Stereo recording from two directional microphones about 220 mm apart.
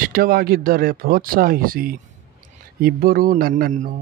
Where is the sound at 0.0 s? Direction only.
40° right (ahead or behind).